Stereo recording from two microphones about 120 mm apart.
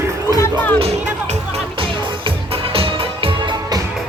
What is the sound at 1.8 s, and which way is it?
Music, 50° right (ahead or behind).